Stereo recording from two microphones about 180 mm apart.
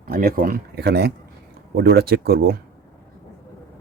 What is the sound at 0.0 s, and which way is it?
Speech, 55° right (ahead or behind).